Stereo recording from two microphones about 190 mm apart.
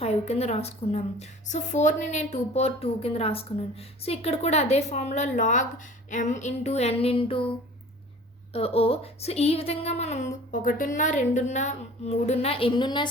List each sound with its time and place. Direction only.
0.0 s a woman's voice: 35° left (ahead or behind)
8.5 s a woman's voice: 30° left (ahead or behind)